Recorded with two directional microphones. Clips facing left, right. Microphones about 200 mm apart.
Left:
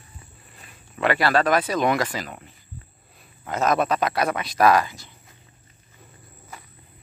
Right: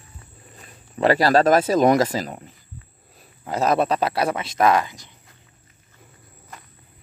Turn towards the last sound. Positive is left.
turn(degrees=-20)  # may be behind; listen again after turning